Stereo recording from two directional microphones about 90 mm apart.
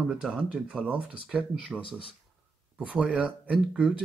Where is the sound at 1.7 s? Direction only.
70° left (ahead or behind).